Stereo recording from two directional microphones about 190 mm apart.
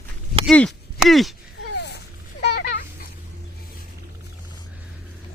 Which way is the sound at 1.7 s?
60° left (ahead or behind).